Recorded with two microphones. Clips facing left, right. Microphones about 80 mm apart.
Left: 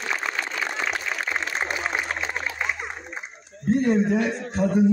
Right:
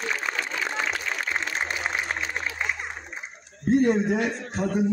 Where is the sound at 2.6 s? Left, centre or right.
Centre.